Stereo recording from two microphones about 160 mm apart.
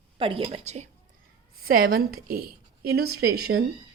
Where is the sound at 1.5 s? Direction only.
65° right (ahead or behind).